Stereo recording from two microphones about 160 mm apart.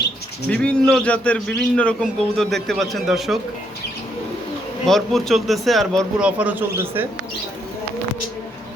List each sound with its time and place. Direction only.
0.5 s a man's voice: 5° left (ahead or behind)
4.9 s a man's voice: centre (ahead or behind)
6.2 s speech: 10° right (ahead or behind)